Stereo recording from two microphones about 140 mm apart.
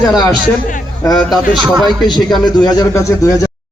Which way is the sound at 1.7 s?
Centre (ahead or behind).